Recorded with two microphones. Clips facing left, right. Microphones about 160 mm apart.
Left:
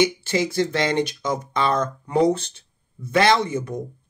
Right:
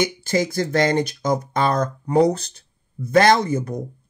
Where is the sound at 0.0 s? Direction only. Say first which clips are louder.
Even; 40° right (ahead or behind).